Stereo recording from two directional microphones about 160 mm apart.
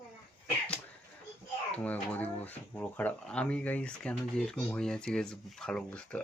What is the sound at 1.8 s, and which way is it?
Speech, 10° left (ahead or behind).